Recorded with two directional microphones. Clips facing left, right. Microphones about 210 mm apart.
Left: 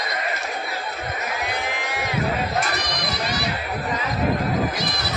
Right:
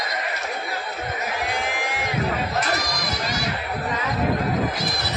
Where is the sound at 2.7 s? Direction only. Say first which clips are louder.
Right 1 dB; 45° right (ahead or behind).